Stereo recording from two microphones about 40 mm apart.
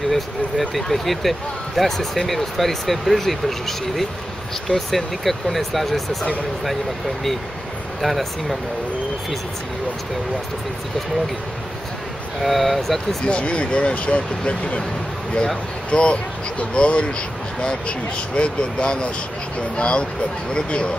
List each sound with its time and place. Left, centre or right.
0.1 s speech: centre
8.0 s speech: centre
12.4 s speech: centre
13.2 s speech: left